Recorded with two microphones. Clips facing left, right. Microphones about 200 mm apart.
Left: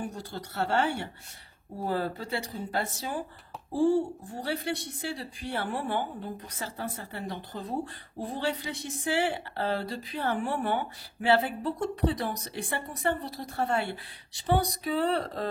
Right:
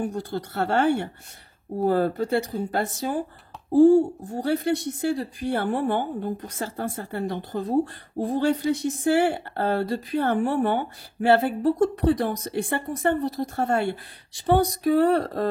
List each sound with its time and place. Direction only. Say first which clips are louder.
0.0 s speech: right 8 dB; 55° right (ahead or behind)